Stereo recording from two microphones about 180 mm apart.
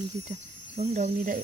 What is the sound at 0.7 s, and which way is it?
Speech, 40° right (ahead or behind).